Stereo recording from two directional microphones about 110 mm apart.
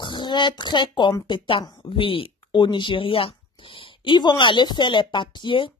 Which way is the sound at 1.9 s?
55° left (ahead or behind).